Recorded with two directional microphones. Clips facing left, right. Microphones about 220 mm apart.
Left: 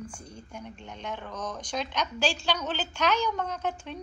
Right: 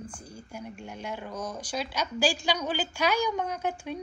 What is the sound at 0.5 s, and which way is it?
A woman's voice, 10° right (ahead or behind).